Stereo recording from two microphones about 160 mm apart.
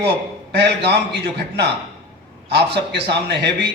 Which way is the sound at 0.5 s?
90° right.